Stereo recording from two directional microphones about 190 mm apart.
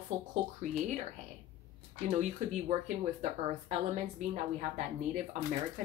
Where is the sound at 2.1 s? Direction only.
40° right (ahead or behind).